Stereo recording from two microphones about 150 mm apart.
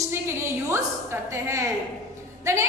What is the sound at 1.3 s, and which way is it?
A woman's voice, 20° right (ahead or behind).